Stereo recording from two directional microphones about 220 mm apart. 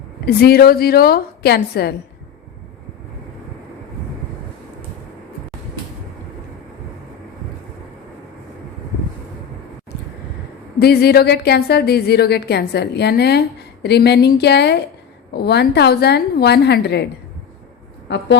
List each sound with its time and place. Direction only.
0.3 s a woman's voice: 45° left (ahead or behind)
10.8 s a woman's voice: 45° left (ahead or behind)